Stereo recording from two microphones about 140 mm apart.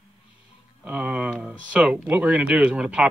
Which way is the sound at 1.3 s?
5° right (ahead or behind).